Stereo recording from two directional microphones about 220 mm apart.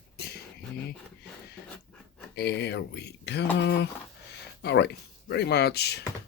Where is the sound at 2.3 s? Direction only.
50° left (ahead or behind).